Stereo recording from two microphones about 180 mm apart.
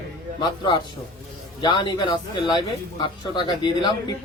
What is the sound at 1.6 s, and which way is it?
Speech, 25° left (ahead or behind).